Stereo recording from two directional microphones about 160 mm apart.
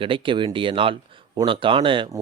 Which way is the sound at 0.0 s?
35° right (ahead or behind).